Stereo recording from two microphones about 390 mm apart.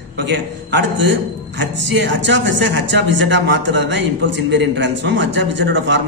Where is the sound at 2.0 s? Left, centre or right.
Right.